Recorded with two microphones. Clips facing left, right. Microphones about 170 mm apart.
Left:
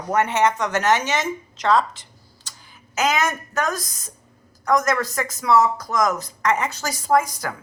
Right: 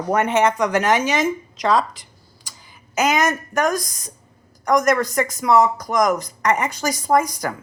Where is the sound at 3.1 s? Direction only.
15° right (ahead or behind).